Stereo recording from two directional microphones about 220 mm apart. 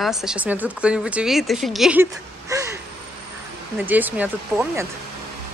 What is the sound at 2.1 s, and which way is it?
Speech, 15° right (ahead or behind).